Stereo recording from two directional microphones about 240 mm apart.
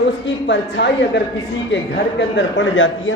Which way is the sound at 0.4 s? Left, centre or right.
Left.